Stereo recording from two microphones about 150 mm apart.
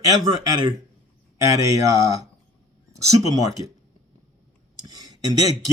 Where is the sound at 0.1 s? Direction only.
25° right (ahead or behind).